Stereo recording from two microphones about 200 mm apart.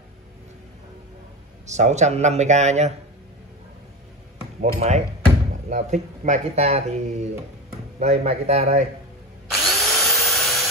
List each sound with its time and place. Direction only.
1.7 s speech: 35° right (ahead or behind)
4.6 s speech: 35° right (ahead or behind)
9.5 s drill: centre (ahead or behind)